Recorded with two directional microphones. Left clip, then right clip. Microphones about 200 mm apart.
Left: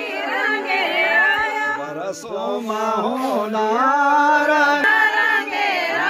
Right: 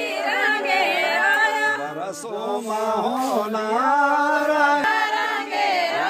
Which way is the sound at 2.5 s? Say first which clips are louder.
Left 1 dB; 40° left (ahead or behind).